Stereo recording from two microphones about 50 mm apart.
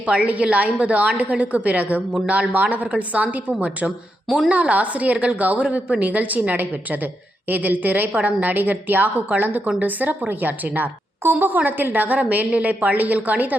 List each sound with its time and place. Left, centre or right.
0.0 s a woman's voice: right